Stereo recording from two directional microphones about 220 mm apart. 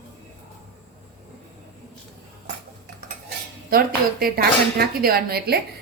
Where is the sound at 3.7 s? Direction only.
40° right (ahead or behind).